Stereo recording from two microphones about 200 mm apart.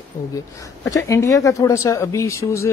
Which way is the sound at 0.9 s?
15° left (ahead or behind).